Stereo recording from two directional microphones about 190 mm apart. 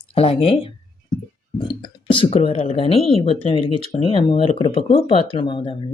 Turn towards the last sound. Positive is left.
turn(degrees=25)  # may be behind; listen again after turning